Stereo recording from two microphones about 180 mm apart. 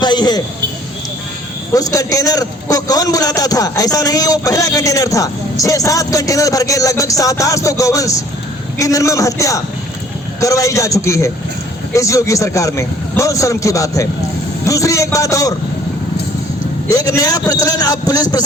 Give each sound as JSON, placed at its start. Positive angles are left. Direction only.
{"t": 0.0, "sound": "a sound", "side_deg": 25}
{"t": 1.7, "sound": "a man's voice", "side_deg": 20}
{"t": 16.9, "sound": "a man's voice", "side_deg": 20}